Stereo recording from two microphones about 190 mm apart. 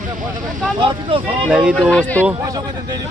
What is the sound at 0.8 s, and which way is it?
Speech, 25° right (ahead or behind).